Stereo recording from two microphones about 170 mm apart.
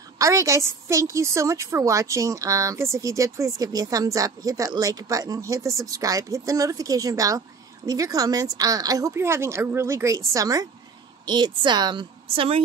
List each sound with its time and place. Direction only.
0.2 s a woman's voice: 20° right (ahead or behind)